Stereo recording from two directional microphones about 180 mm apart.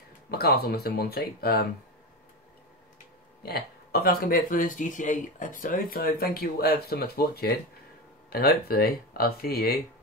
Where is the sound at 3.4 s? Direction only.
60° left (ahead or behind).